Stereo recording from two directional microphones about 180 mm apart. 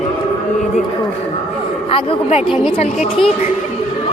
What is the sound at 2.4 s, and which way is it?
Speech, 5° right (ahead or behind).